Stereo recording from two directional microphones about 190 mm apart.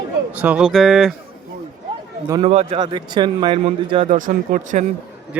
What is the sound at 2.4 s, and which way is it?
Speech, 30° right (ahead or behind).